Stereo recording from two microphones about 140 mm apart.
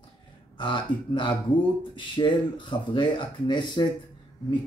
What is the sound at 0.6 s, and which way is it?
Speech, 35° left (ahead or behind).